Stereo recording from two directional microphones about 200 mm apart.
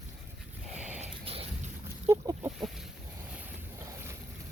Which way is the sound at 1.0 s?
30° right (ahead or behind).